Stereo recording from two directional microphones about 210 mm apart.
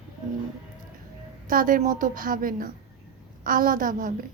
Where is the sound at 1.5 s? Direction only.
40° right (ahead or behind).